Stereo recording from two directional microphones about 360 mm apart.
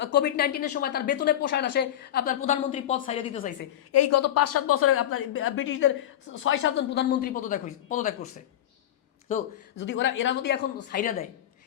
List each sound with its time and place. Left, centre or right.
0.0 s speech: left
3.9 s a woman's voice: left; by 8.1 s centre
9.7 s a woman's voice: left